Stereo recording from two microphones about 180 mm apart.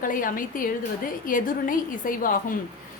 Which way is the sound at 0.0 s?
50° left (ahead or behind).